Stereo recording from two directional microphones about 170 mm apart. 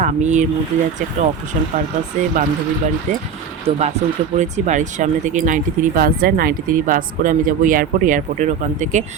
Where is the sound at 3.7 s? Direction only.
40° right (ahead or behind).